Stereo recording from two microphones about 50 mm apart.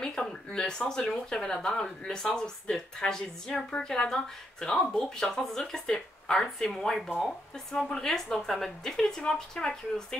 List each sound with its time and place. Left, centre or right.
0.0 s a woman's voice: centre